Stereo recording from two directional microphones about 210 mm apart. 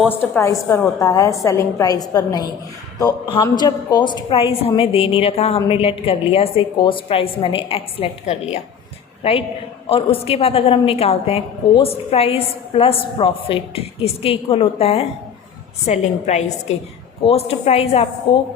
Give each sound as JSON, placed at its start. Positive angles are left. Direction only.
{"t": 0.3, "sound": "a woman's voice", "side_deg": 15}